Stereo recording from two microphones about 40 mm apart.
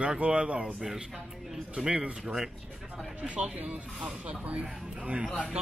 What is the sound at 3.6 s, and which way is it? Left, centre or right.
Speech, right.